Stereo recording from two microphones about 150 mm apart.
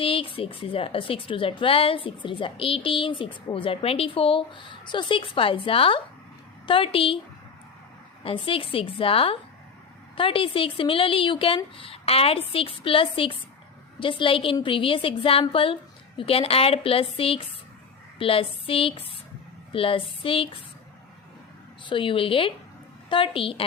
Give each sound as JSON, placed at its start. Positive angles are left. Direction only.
{"t": 0.0, "sound": "a woman's voice", "side_deg": 35}
{"t": 8.2, "sound": "a woman's voice", "side_deg": 35}
{"t": 21.8, "sound": "a woman's voice", "side_deg": 35}